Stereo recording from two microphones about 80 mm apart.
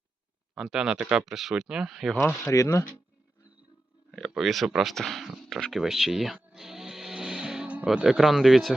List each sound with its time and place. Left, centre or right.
0.5 s speech: centre
2.1 s speech: left
2.5 s speech: left
4.1 s speech: centre
5.8 s music: centre
8.0 s speech: centre